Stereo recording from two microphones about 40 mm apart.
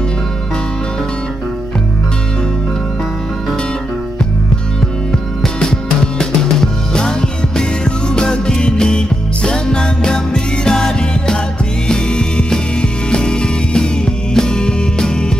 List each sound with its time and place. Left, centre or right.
6.1 s music: centre